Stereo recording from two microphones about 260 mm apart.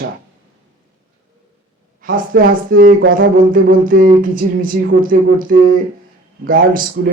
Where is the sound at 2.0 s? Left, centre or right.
Right.